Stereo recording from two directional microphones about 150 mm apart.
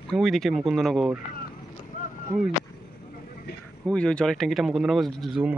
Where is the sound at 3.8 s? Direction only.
5° left (ahead or behind).